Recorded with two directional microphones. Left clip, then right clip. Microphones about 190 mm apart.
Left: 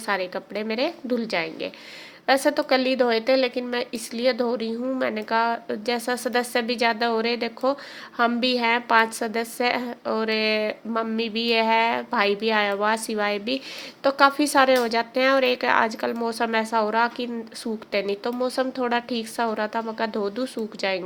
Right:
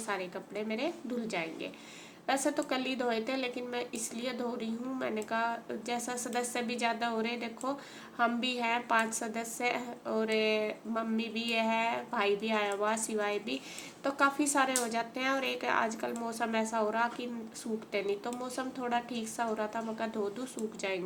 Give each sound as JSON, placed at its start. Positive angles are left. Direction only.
{"t": 0.0, "sound": "speech", "side_deg": 40}